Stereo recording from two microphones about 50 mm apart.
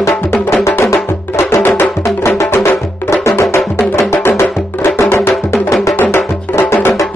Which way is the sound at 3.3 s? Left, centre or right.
Left.